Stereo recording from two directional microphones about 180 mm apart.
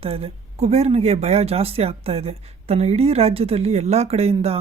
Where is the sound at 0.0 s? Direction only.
35° right (ahead or behind).